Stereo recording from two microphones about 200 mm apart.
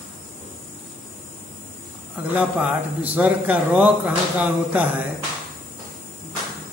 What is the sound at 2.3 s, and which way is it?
Speech, 5° right (ahead or behind).